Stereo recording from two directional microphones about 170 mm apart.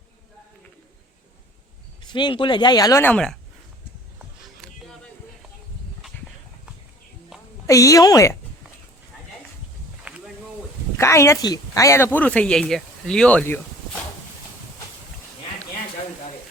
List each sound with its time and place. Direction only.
2.0 s speech: 25° left (ahead or behind); by 3.3 s 5° left (ahead or behind)
7.7 s speech: 20° left (ahead or behind)
10.0 s a sound: 10° right (ahead or behind)
10.9 s speech: 15° left (ahead or behind)